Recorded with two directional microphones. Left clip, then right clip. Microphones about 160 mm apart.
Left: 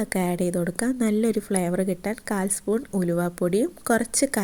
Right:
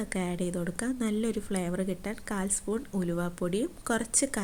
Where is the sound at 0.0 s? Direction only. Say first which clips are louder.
Left 8 dB; 20° left (ahead or behind).